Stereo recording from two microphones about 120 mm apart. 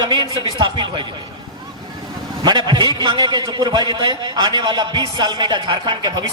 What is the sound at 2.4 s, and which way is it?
A man's voice, 35° right (ahead or behind).